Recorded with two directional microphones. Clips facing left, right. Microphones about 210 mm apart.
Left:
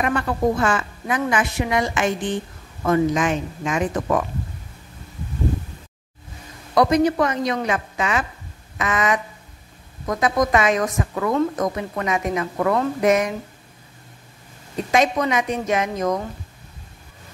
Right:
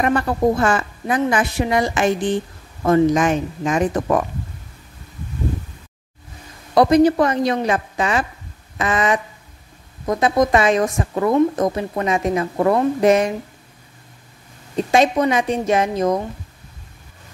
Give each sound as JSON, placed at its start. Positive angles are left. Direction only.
{"t": 0.0, "sound": "a woman's voice", "side_deg": -40}
{"t": 6.7, "sound": "a woman's voice", "side_deg": -30}
{"t": 14.9, "sound": "a woman's voice", "side_deg": -30}